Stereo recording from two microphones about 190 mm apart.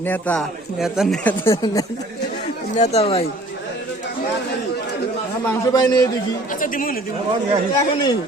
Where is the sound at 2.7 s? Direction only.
35° left (ahead or behind).